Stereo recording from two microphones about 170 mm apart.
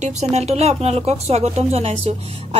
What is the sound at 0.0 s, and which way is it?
A woman's voice, 40° right (ahead or behind).